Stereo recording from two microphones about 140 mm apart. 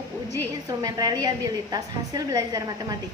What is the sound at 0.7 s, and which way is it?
A woman's voice, 25° right (ahead or behind).